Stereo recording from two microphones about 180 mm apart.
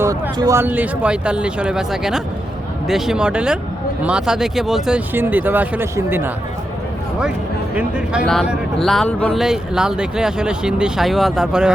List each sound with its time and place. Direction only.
0.0 s speech: 20° right (ahead or behind)
7.8 s speech: 5° right (ahead or behind)